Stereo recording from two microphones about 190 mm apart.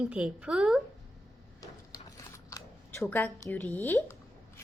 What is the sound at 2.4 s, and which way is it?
Camera, 15° left (ahead or behind).